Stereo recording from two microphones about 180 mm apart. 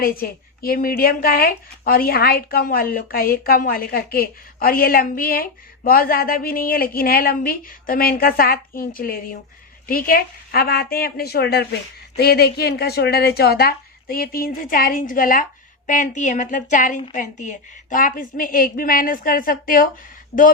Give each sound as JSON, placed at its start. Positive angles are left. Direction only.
{"t": 0.0, "sound": "a woman's voice", "side_deg": 55}